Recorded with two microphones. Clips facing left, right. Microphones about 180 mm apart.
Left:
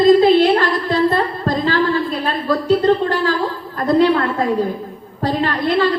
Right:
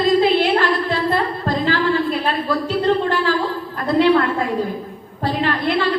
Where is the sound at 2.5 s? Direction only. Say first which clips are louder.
Left 5 dB; 40° left (ahead or behind).